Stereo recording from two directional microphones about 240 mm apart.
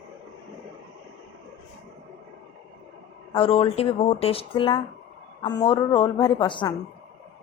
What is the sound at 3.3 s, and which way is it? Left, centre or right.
A woman's voice, left.